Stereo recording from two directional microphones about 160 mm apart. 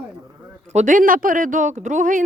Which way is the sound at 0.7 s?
50° right (ahead or behind).